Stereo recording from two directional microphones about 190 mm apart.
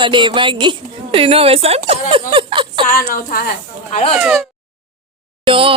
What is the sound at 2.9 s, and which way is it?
Speech, 45° left (ahead or behind).